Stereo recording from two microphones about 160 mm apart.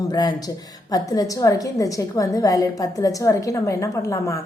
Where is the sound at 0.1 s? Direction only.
25° left (ahead or behind).